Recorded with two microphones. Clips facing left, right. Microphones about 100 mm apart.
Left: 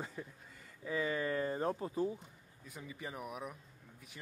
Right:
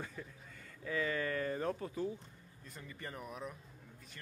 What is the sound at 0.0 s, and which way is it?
Speech, 20° left (ahead or behind).